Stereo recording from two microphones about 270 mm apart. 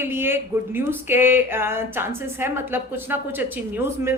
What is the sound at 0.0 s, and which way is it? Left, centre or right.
Speech, centre.